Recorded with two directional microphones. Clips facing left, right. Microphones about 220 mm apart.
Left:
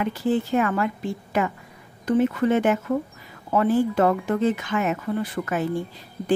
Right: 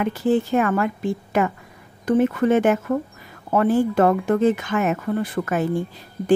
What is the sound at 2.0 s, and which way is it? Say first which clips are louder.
Speech: right 2 dB; 50° right (ahead or behind).